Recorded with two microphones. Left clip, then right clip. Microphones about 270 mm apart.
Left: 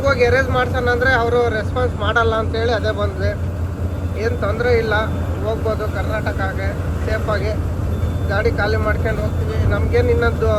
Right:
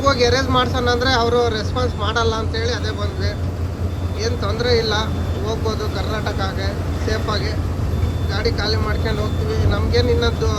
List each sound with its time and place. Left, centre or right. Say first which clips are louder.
0.0 s speech: left 1 dB; centre
7.1 s speech: left 2 dB; centre